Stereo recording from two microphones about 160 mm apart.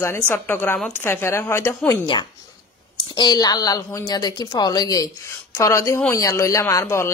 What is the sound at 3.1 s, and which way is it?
A woman's voice, 25° left (ahead or behind).